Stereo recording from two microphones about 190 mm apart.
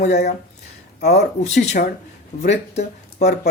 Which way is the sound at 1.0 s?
60° left (ahead or behind).